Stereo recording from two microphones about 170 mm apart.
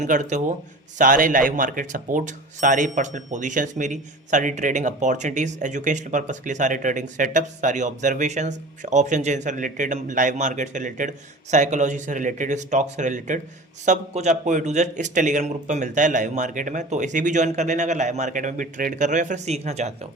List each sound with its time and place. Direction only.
0.0 s speech: 45° right (ahead or behind)